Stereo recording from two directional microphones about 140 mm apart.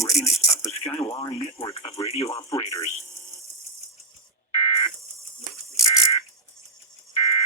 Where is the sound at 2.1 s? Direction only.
50° left (ahead or behind).